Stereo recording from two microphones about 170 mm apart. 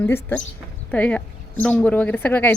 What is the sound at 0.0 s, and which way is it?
A woman's voice, 10° left (ahead or behind).